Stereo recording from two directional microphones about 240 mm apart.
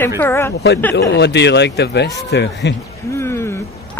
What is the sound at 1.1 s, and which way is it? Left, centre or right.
Speech, left.